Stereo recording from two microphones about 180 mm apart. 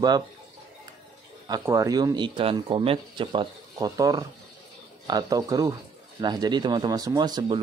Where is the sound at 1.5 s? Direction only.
20° right (ahead or behind).